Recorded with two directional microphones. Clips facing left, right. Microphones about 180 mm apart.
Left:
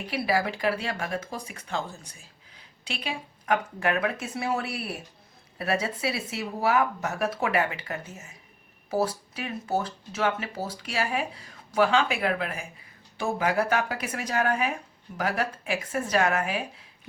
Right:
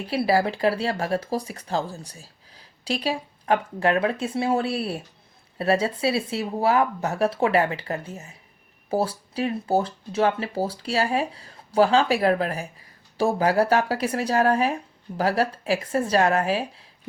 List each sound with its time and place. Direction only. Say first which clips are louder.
0.1 s speech: right 5 dB; 30° right (ahead or behind)